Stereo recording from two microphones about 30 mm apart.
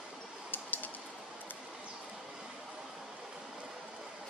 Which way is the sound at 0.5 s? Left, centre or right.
Left.